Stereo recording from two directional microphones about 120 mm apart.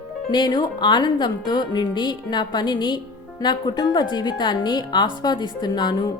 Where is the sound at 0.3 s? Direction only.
35° left (ahead or behind).